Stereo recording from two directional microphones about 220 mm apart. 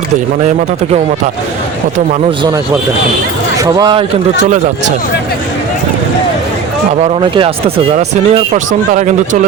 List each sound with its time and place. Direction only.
3.6 s a man's voice: 20° right (ahead or behind)
4.4 s speech: 35° right (ahead or behind)
7.1 s speech: 25° right (ahead or behind)